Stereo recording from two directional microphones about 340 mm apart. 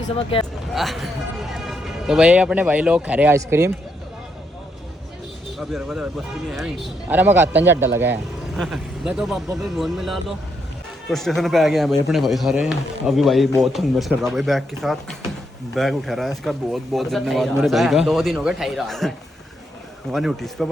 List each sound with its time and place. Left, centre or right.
0.0 s speech: centre
0.7 s speech: centre
5.5 s speech: centre